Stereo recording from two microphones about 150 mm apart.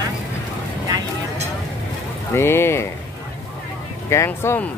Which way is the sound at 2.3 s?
15° left (ahead or behind).